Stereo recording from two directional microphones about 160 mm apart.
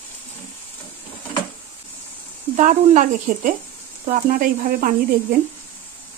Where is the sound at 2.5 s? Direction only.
50° right (ahead or behind).